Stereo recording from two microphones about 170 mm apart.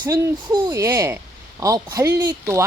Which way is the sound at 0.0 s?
25° right (ahead or behind).